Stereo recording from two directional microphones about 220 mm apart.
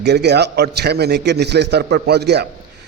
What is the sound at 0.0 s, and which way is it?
A man's voice, 50° right (ahead or behind).